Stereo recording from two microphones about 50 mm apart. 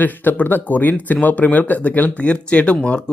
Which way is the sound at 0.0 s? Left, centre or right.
Left.